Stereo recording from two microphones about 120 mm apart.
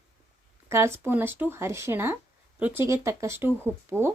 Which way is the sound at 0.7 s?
20° right (ahead or behind).